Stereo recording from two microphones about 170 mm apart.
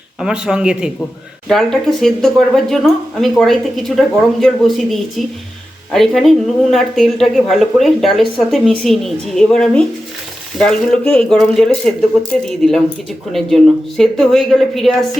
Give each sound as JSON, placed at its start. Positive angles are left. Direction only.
{"t": 0.2, "sound": "speech", "side_deg": -5}